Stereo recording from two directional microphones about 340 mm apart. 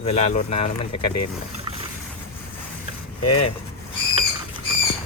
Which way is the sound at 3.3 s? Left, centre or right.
Left.